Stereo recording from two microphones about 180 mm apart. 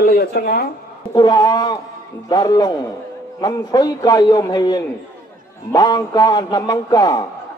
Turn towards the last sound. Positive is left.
turn(degrees=20)  # may be behind; listen again after turning